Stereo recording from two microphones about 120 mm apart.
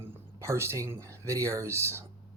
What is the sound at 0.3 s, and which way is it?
Speech, 25° right (ahead or behind).